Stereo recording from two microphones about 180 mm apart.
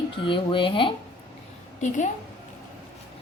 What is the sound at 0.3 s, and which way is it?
Speech, 30° left (ahead or behind).